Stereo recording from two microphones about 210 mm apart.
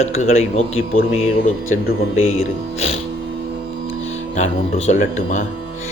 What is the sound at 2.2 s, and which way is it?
Speech, 30° left (ahead or behind).